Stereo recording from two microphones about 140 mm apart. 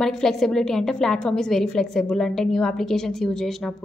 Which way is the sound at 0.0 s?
5° left (ahead or behind).